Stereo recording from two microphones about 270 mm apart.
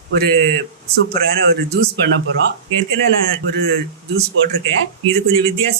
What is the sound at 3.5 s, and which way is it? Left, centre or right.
Speech, right.